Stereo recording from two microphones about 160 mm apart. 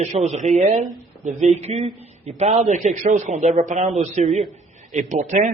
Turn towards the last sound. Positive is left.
turn(degrees=-50)  # may be behind; listen again after turning